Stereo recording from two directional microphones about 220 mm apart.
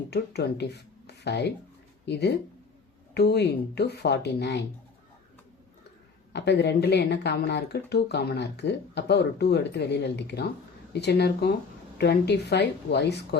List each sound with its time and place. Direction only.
0.1 s speech: 50° left (ahead or behind)
6.3 s speech: 50° left (ahead or behind)